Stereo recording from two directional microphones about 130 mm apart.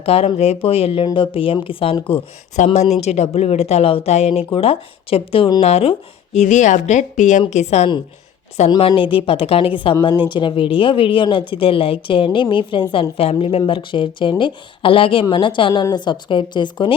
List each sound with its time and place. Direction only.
0.0 s a woman's voice: 50° left (ahead or behind)
2.7 s speech: 55° left (ahead or behind)
7.5 s speech: 60° left (ahead or behind)
8.9 s a woman's voice: 40° left (ahead or behind)